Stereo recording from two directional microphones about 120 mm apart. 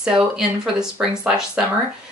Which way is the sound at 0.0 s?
5° right (ahead or behind).